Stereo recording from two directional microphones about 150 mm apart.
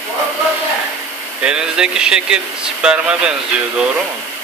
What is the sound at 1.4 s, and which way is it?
Speech, 5° right (ahead or behind).